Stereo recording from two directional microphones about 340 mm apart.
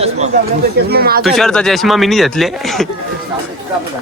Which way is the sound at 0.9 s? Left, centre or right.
Right.